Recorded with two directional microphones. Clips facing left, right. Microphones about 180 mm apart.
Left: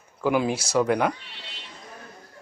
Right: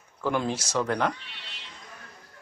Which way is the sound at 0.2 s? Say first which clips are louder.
Left 4 dB; 10° left (ahead or behind).